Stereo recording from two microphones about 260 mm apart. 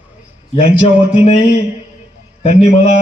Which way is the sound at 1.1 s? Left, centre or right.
Left.